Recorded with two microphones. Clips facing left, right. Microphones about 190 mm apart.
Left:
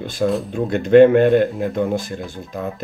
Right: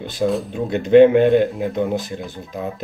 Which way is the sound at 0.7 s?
50° left (ahead or behind).